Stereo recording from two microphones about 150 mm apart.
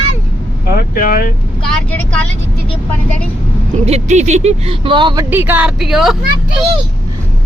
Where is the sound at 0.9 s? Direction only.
80° left.